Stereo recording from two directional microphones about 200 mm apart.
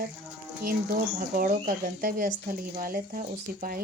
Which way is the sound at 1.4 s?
45° right (ahead or behind).